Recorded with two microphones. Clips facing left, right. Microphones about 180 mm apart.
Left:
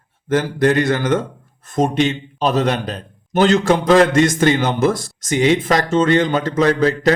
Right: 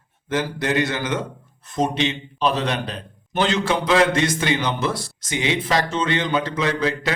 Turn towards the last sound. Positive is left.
turn(degrees=40)  # may be behind; listen again after turning